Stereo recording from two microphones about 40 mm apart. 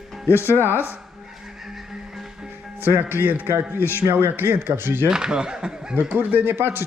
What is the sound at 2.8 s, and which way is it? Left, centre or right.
Speech, right.